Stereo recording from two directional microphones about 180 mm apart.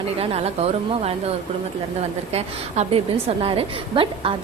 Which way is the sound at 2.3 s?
35° right (ahead or behind).